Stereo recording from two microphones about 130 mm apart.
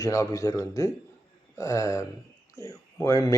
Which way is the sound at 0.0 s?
25° left (ahead or behind).